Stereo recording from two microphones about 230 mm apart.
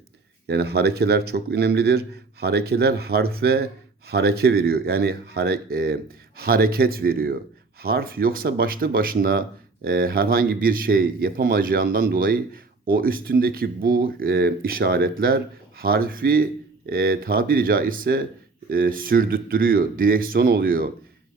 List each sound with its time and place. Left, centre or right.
0.4 s a man's voice: right